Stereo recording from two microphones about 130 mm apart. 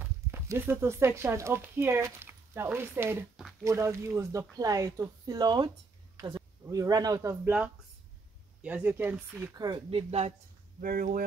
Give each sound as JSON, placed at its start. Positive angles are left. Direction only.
{"t": 0.0, "sound": "speech", "side_deg": -15}
{"t": 7.2, "sound": "speech", "side_deg": -15}
{"t": 9.8, "sound": "speech", "side_deg": -50}
{"t": 10.8, "sound": "speech", "side_deg": -90}